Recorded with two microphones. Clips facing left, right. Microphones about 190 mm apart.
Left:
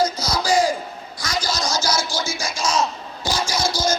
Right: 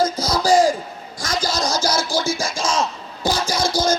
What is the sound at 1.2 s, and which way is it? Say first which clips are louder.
Scratching: right 3 dB; 50° right (ahead or behind).